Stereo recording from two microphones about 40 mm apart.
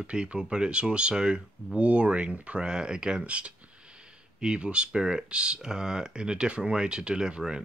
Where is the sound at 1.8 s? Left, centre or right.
Right.